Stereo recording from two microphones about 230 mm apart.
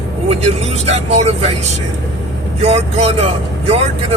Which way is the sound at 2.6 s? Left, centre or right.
Right.